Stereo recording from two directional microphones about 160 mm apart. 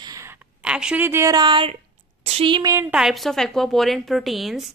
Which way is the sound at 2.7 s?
15° right (ahead or behind).